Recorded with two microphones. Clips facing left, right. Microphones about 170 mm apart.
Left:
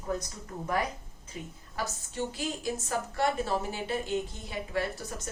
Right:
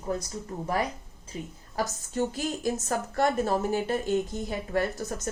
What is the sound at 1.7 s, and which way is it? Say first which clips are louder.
A woman's voice: right 6 dB; 40° right (ahead or behind).